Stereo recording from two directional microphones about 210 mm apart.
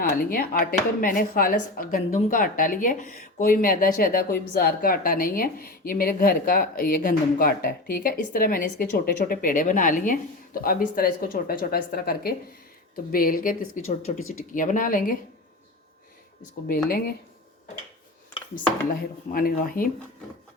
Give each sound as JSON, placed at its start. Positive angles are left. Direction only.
{"t": 0.0, "sound": "speech", "side_deg": 45}
{"t": 18.5, "sound": "speech", "side_deg": 45}